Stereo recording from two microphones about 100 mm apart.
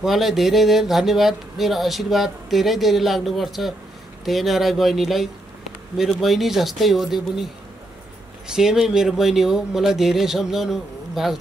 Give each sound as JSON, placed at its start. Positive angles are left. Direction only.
{"t": 0.0, "sound": "speech", "side_deg": 0}
{"t": 8.5, "sound": "speech", "side_deg": -5}